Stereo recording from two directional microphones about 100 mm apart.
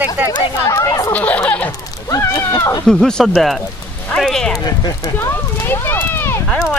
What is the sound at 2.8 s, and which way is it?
Speech, 5° left (ahead or behind).